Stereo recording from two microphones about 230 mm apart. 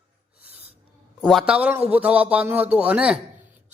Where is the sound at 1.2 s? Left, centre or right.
Centre.